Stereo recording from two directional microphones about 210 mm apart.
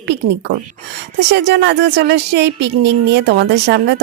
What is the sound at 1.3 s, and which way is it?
Speech, 55° right (ahead or behind).